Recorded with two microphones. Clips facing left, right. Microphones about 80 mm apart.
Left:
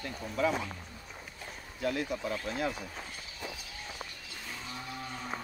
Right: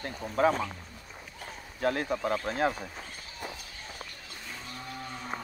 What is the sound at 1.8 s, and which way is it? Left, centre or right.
Speech, right.